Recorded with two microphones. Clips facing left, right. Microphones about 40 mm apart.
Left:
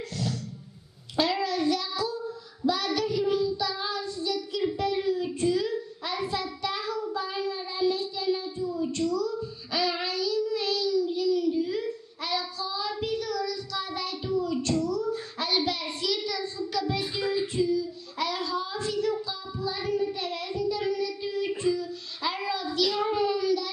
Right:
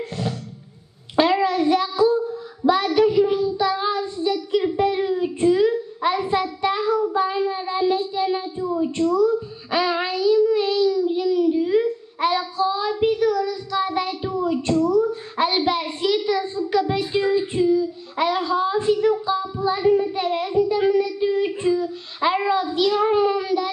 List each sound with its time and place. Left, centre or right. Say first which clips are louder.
1.1 s child singing: right 8 dB; right
16.3 s a sound: right 10 dB; right
17.1 s child singing: right 8 dB; right